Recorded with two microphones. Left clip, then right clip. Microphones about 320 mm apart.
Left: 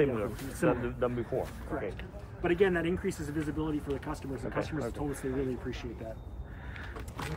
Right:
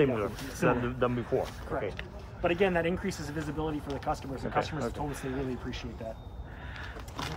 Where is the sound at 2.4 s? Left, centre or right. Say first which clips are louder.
Right 1 dB; centre.